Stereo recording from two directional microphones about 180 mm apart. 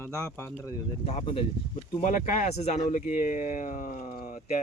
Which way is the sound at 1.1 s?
35° left (ahead or behind).